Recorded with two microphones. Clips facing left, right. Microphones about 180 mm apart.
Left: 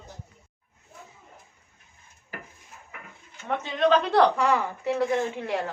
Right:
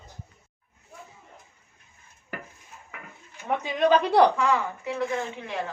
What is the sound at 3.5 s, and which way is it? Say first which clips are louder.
Speech: right 1 dB; 10° right (ahead or behind).